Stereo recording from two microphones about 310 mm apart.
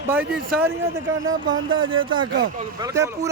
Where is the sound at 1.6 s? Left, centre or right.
Centre.